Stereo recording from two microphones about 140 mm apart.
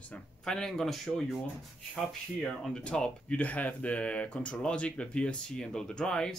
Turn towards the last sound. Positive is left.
turn(degrees=5)  # may be behind; listen again after turning